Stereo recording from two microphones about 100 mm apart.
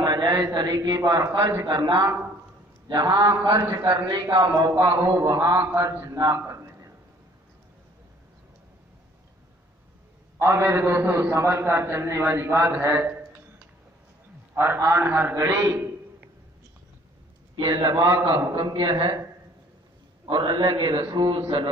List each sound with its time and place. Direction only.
0.0 s a man's voice: 45° right (ahead or behind)
3.9 s a man's voice: 50° right (ahead or behind)
6.3 s a sound: 30° right (ahead or behind)
10.4 s a man's voice: 25° right (ahead or behind)
14.5 s a man's voice: 25° right (ahead or behind)
15.3 s a man's voice: 35° right (ahead or behind)
15.7 s a sound: 20° right (ahead or behind)
17.6 s a man's voice: 45° right (ahead or behind)
18.2 s a man's voice: 55° right (ahead or behind)
20.2 s a man's voice: 55° right (ahead or behind)